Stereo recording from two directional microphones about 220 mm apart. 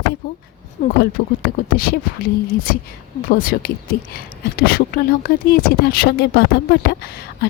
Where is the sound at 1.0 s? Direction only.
40° left (ahead or behind).